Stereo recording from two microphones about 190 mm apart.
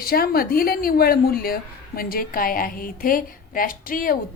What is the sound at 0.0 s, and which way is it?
A woman's voice, 50° left (ahead or behind).